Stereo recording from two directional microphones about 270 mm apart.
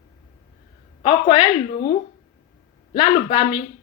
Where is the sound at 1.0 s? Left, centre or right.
Centre.